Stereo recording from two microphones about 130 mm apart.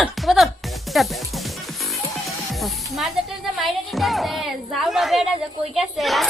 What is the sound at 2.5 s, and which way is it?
A woman's voice, centre (ahead or behind).